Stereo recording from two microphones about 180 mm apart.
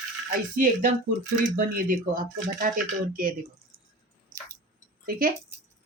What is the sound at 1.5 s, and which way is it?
Speech, 50° right (ahead or behind).